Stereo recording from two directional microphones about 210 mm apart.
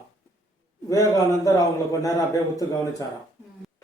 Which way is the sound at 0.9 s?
15° left (ahead or behind).